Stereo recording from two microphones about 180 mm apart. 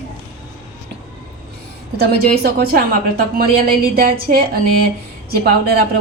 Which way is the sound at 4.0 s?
55° right (ahead or behind).